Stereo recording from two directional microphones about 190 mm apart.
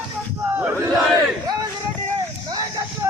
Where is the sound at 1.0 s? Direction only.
Centre (ahead or behind).